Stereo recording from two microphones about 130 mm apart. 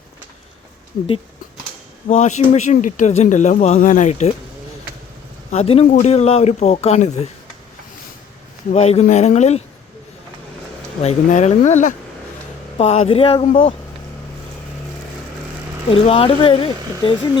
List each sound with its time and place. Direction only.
2.0 s speech: 65° left (ahead or behind)
5.5 s speech: 50° left (ahead or behind)
8.7 s speech: 55° left (ahead or behind)
11.0 s speech: 65° left (ahead or behind)
12.7 s speech: 55° left (ahead or behind)
15.9 s speech: 45° left (ahead or behind)